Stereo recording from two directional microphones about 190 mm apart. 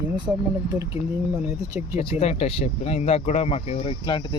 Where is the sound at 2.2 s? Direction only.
35° left (ahead or behind).